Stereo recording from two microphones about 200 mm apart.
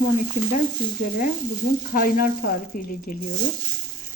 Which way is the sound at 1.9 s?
45° left (ahead or behind).